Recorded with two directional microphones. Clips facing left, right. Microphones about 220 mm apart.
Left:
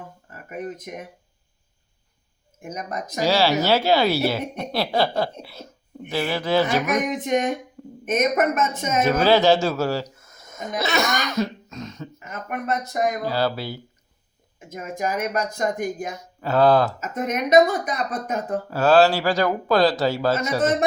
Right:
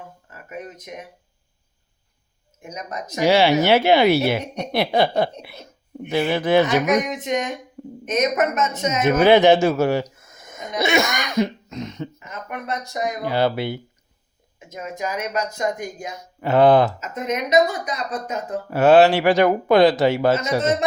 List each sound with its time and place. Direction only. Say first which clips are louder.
0.4 s speech: left 3 dB; 55° left (ahead or behind)
2.6 s speech: left 1 dB; 55° left (ahead or behind)
3.2 s speech: right 4 dB; 20° right (ahead or behind)
7.1 s speech: left 2 dB; 55° left (ahead or behind)
9.0 s speech: right 4 dB; 20° right (ahead or behind)
12.2 s speech: left 2 dB; 45° left (ahead or behind)
13.2 s speech: right 3 dB; 20° right (ahead or behind)
14.7 s speech: left 1 dB; 50° left (ahead or behind)
16.4 s speech: right 3 dB; 20° right (ahead or behind)
17.0 s speech: even; 50° left (ahead or behind)
18.7 s speech: right 4 dB; 20° right (ahead or behind)